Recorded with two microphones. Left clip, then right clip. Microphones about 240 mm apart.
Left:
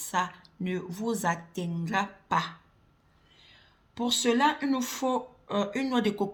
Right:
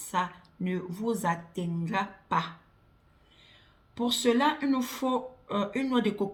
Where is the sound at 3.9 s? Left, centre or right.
Left.